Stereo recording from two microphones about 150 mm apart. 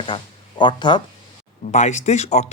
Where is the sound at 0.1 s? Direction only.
25° left (ahead or behind).